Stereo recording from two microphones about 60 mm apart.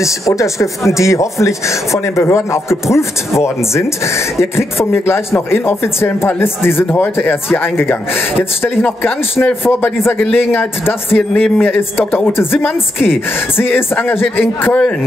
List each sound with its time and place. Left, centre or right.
0.0 s a woman's voice: left